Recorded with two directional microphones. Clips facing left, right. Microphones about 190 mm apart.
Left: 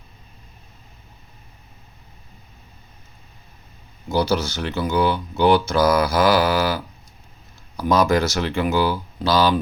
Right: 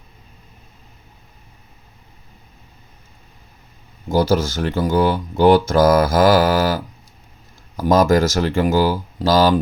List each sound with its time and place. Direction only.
4.1 s speech: 45° right (ahead or behind)